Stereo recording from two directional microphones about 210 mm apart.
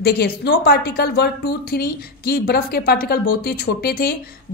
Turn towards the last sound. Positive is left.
turn(degrees=45)  # may be behind; listen again after turning